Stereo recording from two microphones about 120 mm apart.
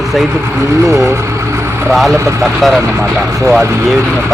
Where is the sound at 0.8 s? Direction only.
25° right (ahead or behind).